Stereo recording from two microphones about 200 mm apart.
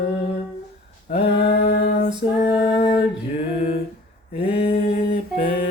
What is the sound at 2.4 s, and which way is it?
Female singing, 35° left (ahead or behind).